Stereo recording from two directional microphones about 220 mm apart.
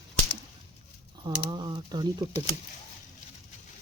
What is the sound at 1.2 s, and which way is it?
Speech, 20° right (ahead or behind).